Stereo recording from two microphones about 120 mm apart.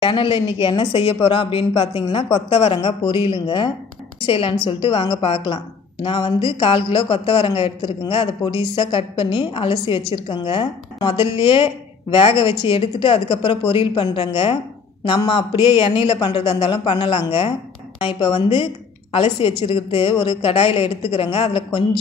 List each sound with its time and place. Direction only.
0.0 s a woman's voice: 45° left (ahead or behind)